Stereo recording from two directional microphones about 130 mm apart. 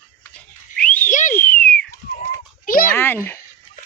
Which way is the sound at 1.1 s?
75° left (ahead or behind).